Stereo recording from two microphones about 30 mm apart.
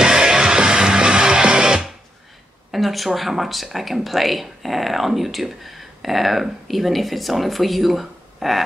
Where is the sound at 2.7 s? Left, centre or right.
Centre.